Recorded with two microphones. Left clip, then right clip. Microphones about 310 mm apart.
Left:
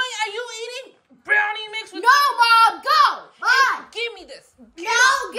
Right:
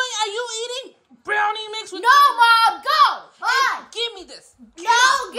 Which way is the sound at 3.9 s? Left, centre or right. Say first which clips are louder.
Right 1 dB; centre.